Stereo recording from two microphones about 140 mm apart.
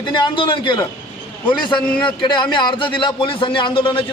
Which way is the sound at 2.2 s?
35° left (ahead or behind).